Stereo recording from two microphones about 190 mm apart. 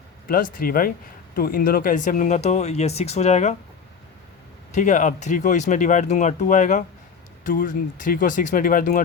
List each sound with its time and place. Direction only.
0.3 s speech: 45° left (ahead or behind)
4.7 s speech: 40° left (ahead or behind)